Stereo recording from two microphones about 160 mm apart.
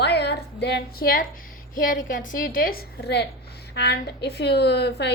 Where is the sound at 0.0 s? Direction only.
90° left; by 1.3 s 65° left (ahead or behind).